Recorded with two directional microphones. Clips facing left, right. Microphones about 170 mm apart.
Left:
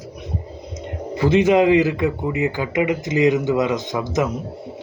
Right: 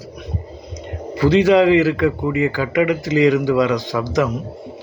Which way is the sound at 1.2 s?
20° left (ahead or behind).